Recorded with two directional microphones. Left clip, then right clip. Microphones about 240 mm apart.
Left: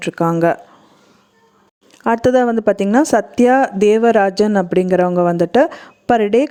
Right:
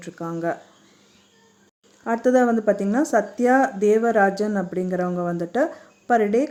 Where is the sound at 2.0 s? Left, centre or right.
Left.